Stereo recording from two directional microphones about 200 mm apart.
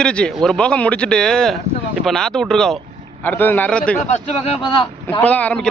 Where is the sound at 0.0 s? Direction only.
5° left (ahead or behind).